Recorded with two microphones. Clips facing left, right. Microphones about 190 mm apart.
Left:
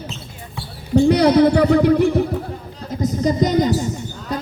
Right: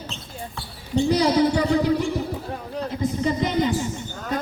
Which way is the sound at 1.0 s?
60° left (ahead or behind).